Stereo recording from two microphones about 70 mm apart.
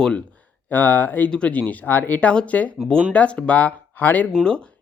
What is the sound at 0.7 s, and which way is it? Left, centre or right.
Speech, left.